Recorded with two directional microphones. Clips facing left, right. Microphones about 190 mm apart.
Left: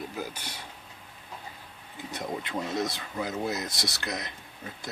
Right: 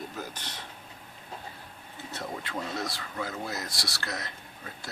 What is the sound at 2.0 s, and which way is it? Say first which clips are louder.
Speech: left 3 dB; 20° left (ahead or behind).